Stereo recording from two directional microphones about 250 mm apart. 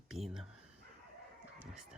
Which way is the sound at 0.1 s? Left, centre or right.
Centre.